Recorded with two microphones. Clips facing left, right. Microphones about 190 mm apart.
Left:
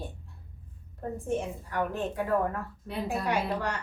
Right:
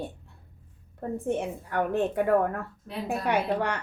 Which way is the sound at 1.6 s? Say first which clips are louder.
Right 7 dB; 60° right (ahead or behind).